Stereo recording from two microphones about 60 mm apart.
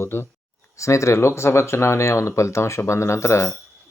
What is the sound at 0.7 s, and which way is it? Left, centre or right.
Speech, left.